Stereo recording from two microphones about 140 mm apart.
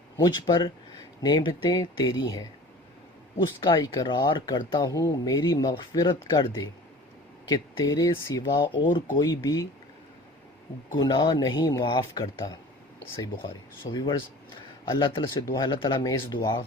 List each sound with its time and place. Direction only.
0.2 s speech: 30° left (ahead or behind)
10.9 s speech: 30° left (ahead or behind)
16.0 s speech: 25° left (ahead or behind)